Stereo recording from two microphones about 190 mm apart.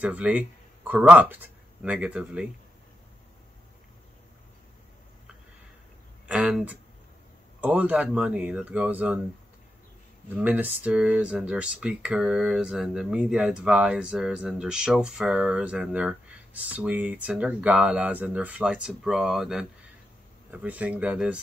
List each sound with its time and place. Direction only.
0.0 s speech: 5° right (ahead or behind)
6.2 s speech: 5° right (ahead or behind)
10.3 s speech: 10° right (ahead or behind)